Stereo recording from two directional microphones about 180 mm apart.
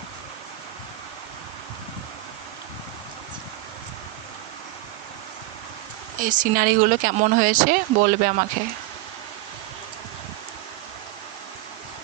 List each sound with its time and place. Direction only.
6.1 s speech: 45° right (ahead or behind)